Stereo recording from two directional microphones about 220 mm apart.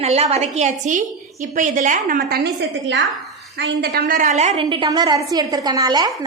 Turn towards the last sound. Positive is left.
turn(degrees=-20)  # may be behind; listen again after turning